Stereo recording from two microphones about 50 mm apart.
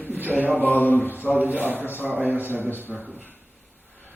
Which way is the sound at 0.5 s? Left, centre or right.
Left.